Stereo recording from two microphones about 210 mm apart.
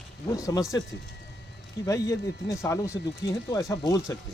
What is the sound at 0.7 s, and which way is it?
Speech, 15° left (ahead or behind).